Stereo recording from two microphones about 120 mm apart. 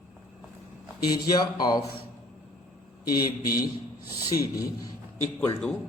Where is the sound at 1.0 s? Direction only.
35° left (ahead or behind).